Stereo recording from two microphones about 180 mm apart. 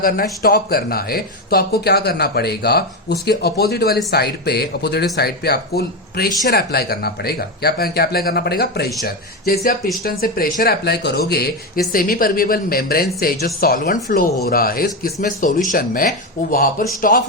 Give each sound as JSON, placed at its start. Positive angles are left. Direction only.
{"t": 0.0, "sound": "speech", "side_deg": 55}